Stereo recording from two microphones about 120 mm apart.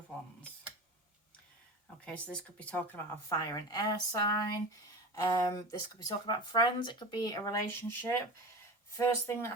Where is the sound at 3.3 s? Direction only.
35° left (ahead or behind).